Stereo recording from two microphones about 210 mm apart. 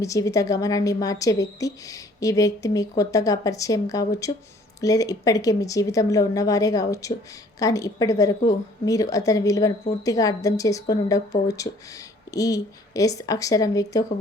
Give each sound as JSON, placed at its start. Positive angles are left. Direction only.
{"t": 0.0, "sound": "a woman's voice", "side_deg": 15}